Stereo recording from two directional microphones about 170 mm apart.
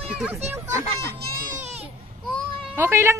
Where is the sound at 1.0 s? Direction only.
60° right (ahead or behind).